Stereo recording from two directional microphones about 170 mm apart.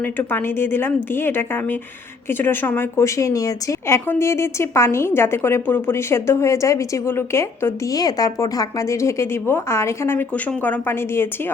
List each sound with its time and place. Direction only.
0.2 s a woman's voice: 15° left (ahead or behind)